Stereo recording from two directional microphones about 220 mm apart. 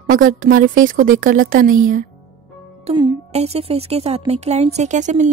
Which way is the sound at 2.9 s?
25° right (ahead or behind).